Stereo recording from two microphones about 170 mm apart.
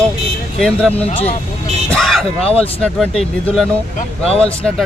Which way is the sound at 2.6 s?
5° left (ahead or behind).